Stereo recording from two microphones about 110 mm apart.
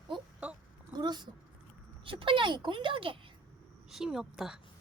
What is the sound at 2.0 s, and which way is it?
Speech, 50° right (ahead or behind).